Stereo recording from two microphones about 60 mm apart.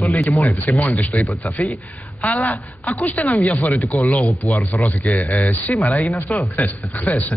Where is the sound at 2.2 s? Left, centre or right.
Left.